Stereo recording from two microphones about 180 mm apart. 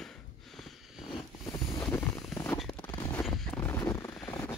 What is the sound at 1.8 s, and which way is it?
Vehicle, 10° left (ahead or behind).